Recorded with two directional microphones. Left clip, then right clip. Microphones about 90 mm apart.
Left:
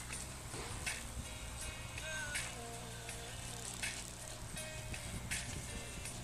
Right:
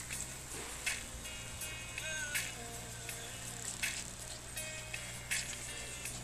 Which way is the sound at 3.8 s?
10° left (ahead or behind).